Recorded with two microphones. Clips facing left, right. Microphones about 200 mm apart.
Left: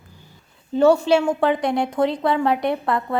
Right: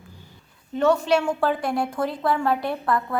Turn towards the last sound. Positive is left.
turn(degrees=20)  # may be behind; listen again after turning